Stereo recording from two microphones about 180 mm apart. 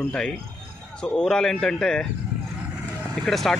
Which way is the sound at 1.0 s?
5° left (ahead or behind).